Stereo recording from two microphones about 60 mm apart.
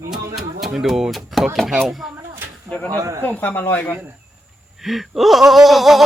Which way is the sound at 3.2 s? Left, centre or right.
Left.